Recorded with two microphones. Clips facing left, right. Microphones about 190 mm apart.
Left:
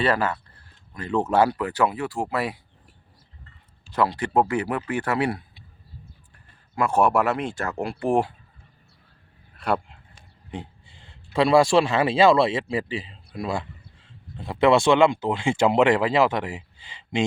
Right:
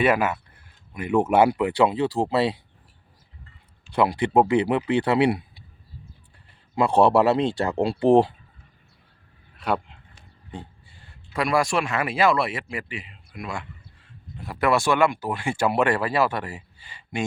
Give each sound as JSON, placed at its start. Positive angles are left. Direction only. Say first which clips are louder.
{"t": 0.0, "sound": "speech", "louder": "right 2 dB", "side_deg": -10}
{"t": 3.9, "sound": "speech", "louder": "right 2 dB", "side_deg": -15}
{"t": 6.8, "sound": "speech", "louder": "right 3 dB", "side_deg": -35}
{"t": 9.6, "sound": "speech", "louder": "left 1 dB", "side_deg": -5}
{"t": 10.5, "sound": "speech", "louder": "left 3 dB", "side_deg": 20}